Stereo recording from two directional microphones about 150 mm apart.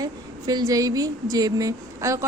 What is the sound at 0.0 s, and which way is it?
A woman's voice, 25° right (ahead or behind).